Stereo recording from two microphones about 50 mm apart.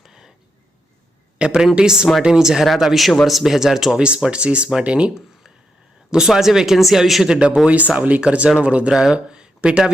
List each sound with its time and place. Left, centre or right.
0.0 s a sound: centre
1.4 s a man's voice: centre
4.0 s speech: centre
6.1 s speech: centre
7.3 s speech: centre
8.9 s speech: centre